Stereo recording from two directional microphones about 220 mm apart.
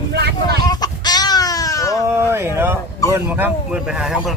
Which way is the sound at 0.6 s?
20° left (ahead or behind).